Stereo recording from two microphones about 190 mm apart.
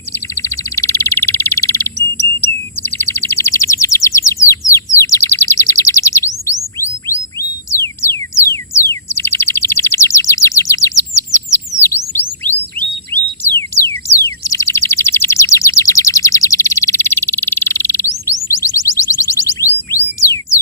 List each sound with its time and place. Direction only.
0.3 s bird: 15° left (ahead or behind)
2.4 s chirp: 10° left (ahead or behind)
6.7 s music: 15° left (ahead or behind)
11.7 s chirp tone: 15° left (ahead or behind)
12.8 s bird vocalization: 55° right (ahead or behind)
13.4 s a sound: 15° left (ahead or behind)
18.6 s chirp tone: 15° left (ahead or behind)